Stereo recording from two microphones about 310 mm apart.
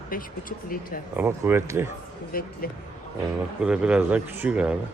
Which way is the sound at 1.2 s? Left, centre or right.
Centre.